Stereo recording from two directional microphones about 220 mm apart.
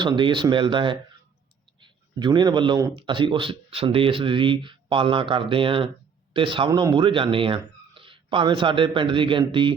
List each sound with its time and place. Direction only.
0.0 s a man's voice: 20° right (ahead or behind)